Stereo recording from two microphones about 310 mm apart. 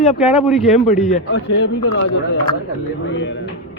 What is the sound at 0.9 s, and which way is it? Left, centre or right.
Speech, left.